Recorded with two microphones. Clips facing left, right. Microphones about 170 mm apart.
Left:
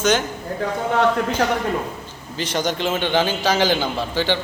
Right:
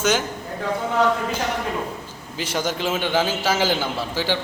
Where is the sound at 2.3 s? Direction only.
5° right (ahead or behind).